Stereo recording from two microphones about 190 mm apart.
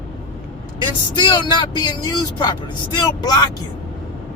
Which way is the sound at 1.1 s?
25° left (ahead or behind).